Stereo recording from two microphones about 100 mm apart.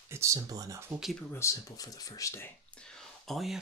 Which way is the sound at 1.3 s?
30° left (ahead or behind).